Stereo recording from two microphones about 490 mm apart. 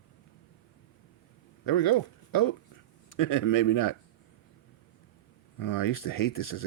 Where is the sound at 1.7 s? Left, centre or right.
Left.